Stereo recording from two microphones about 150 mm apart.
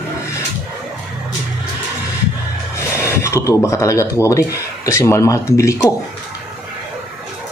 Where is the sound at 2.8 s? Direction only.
20° left (ahead or behind).